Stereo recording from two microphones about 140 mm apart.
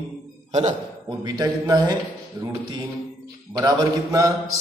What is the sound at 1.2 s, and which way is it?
Speech, 25° right (ahead or behind).